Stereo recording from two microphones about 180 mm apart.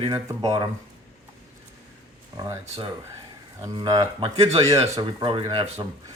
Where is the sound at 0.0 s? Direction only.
20° right (ahead or behind).